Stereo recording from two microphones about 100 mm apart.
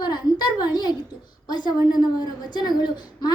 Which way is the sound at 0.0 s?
45° left (ahead or behind).